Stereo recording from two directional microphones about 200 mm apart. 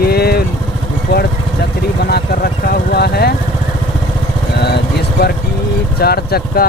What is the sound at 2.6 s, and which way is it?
Speech, 50° left (ahead or behind).